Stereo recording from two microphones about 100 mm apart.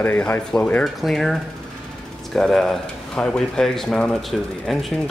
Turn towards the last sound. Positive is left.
turn(degrees=0)  # may be behind; listen again after turning